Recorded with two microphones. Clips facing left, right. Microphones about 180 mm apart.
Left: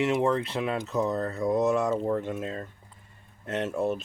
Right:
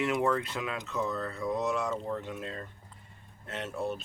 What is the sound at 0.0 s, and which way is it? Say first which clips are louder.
Speech: left 4 dB; 25° left (ahead or behind).